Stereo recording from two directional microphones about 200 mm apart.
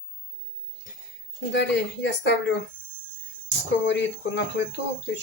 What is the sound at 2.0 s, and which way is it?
Speech, 60° left (ahead or behind).